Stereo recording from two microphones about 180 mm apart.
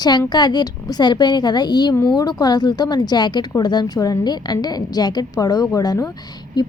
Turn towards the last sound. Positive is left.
turn(degrees=20)  # may be behind; listen again after turning